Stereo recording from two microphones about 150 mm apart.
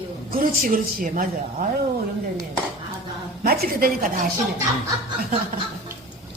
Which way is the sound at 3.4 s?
75° right (ahead or behind).